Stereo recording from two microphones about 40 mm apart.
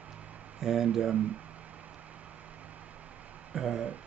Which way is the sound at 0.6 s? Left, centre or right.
Centre.